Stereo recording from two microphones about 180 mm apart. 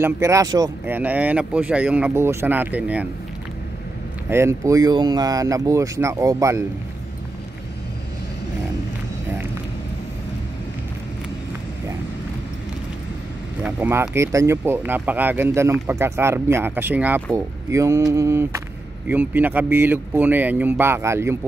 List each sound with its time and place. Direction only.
0.0 s speech: 15° right (ahead or behind)
4.3 s speech: 15° right (ahead or behind)
13.6 s speech: 10° right (ahead or behind)